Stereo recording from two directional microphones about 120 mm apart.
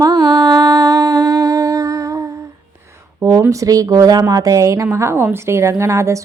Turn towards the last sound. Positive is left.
turn(degrees=-25)  # may be behind; listen again after turning